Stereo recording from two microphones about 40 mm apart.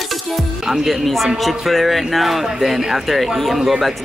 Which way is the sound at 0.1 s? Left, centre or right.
Centre.